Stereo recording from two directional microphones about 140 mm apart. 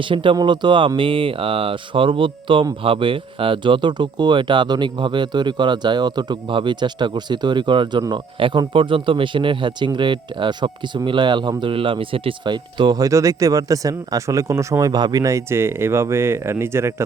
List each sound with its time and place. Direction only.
0.1 s speech: 35° right (ahead or behind); by 16.9 s 20° right (ahead or behind)